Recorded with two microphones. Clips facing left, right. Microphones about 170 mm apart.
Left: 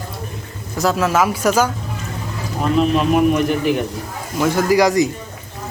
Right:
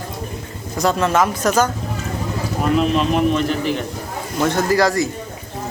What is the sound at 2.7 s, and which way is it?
A man's voice, centre (ahead or behind).